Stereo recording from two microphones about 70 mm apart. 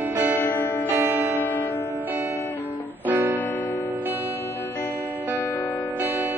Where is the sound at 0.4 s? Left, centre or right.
Left.